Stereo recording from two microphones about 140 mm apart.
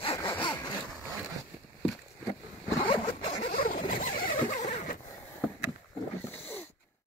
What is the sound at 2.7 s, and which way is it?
Zipper, 45° left (ahead or behind).